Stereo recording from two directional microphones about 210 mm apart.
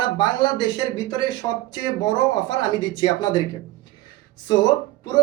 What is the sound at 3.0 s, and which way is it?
Speech, 20° left (ahead or behind).